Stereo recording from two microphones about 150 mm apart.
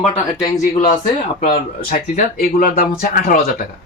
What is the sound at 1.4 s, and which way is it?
Speech, 70° left (ahead or behind).